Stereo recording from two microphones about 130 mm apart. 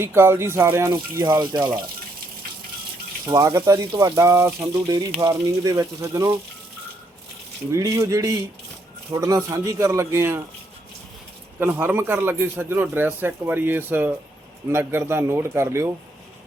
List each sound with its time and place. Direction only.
0.0 s speech: 20° right (ahead or behind)
3.2 s speech: 25° right (ahead or behind)
7.7 s speech: 25° right (ahead or behind)
11.6 s speech: 15° right (ahead or behind)